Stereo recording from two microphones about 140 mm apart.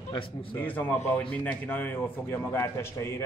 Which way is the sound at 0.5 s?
15° left (ahead or behind).